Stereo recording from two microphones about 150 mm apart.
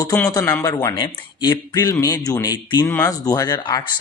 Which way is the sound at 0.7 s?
25° left (ahead or behind).